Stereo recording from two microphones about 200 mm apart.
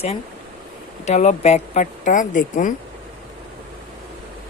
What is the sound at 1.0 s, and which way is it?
Speech, 35° left (ahead or behind).